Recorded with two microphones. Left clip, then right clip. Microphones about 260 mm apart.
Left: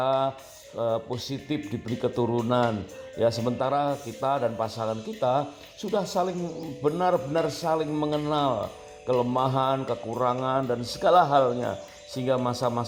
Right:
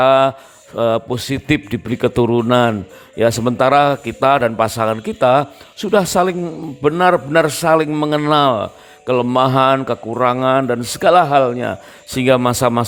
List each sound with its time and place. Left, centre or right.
0.0 s a man's voice: right
11.4 s a man's voice: right